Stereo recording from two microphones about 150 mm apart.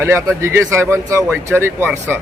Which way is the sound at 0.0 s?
15° right (ahead or behind).